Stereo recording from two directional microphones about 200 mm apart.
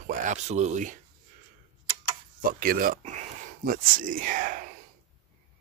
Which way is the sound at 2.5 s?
50° right (ahead or behind).